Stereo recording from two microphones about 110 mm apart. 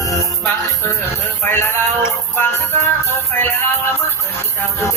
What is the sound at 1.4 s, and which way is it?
Music, 20° left (ahead or behind).